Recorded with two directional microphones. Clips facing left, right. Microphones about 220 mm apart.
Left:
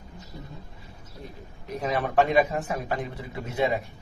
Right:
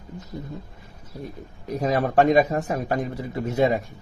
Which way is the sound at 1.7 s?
40° right (ahead or behind).